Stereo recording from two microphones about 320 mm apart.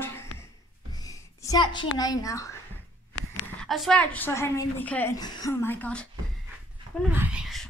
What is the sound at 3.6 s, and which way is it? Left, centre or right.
A woman's voice, centre.